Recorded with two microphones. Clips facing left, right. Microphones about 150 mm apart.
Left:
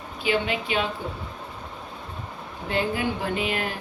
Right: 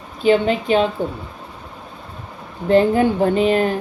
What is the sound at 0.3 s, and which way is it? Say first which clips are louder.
Speech: right 10 dB; 40° right (ahead or behind).